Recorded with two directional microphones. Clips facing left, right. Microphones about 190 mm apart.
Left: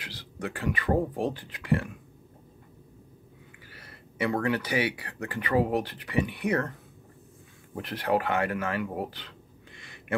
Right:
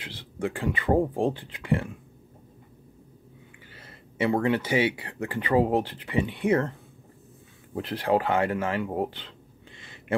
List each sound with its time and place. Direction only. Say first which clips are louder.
0.0 s speech: right 5 dB; 25° right (ahead or behind)
3.7 s speech: right 3 dB; 25° right (ahead or behind)
7.7 s speech: right 3 dB; 30° right (ahead or behind)
9.8 s a sound: right 5 dB; 25° right (ahead or behind)